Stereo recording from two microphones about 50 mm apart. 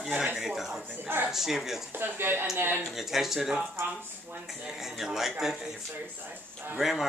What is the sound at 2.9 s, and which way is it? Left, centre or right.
Speech, centre.